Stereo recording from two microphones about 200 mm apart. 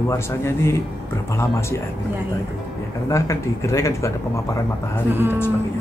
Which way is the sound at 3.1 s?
15° left (ahead or behind).